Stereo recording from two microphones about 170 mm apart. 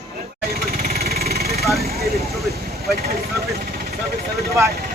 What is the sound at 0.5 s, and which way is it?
Vehicle, 60° right (ahead or behind).